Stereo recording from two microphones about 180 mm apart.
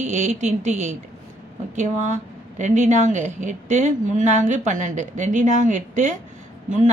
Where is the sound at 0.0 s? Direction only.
40° right (ahead or behind).